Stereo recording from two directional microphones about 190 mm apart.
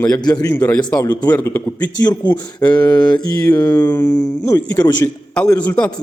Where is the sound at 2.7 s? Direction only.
20° left (ahead or behind).